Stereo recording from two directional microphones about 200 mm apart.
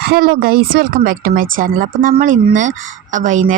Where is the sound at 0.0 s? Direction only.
50° right (ahead or behind).